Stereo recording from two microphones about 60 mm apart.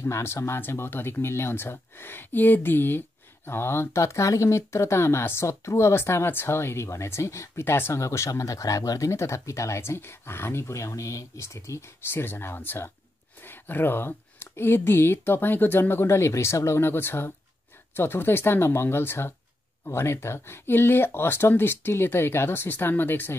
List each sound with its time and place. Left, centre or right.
0.0 s speech: left
7.6 s speech: left
8.0 s speech: left
12.1 s speech: left